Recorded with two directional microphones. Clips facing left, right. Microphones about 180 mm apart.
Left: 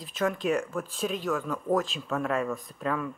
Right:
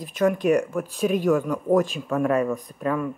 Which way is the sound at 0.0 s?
15° right (ahead or behind).